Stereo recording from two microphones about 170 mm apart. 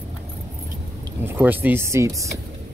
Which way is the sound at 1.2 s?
10° right (ahead or behind).